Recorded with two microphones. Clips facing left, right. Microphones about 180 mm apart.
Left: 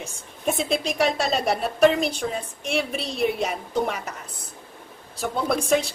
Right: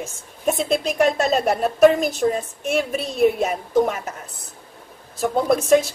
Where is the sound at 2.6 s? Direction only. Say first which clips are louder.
Right 4 dB; 45° right (ahead or behind).